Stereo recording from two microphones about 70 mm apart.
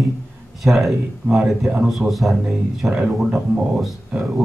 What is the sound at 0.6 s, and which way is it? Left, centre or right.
Speech, centre.